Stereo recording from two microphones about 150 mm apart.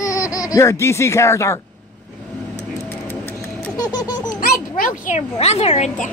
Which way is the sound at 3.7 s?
25° left (ahead or behind).